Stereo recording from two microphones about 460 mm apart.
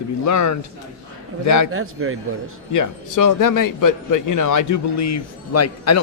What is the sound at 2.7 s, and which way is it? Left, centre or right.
A man's voice, left.